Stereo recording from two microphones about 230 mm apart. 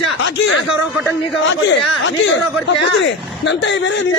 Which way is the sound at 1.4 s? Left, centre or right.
Left.